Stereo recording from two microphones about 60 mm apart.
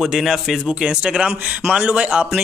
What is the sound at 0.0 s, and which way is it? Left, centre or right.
A man's voice, centre.